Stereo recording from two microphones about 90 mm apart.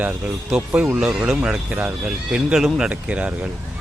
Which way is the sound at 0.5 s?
15° right (ahead or behind).